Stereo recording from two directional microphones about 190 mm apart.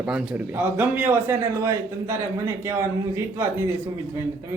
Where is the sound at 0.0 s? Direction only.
5° right (ahead or behind).